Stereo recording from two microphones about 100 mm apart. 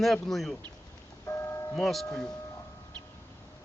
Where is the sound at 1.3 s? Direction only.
25° left (ahead or behind).